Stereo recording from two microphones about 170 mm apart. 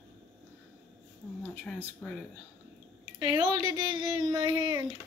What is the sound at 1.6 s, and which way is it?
Speech, 5° left (ahead or behind).